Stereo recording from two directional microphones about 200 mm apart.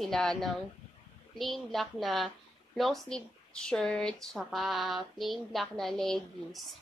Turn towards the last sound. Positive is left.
turn(degrees=0)  # may be behind; listen again after turning